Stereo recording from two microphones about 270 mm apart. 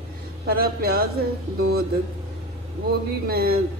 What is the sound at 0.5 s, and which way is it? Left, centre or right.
A woman's voice, right.